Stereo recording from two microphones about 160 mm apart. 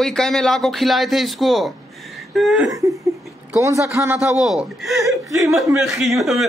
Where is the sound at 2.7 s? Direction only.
20° right (ahead or behind).